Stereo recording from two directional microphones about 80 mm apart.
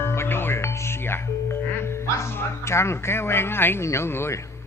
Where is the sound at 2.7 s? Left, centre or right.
Left.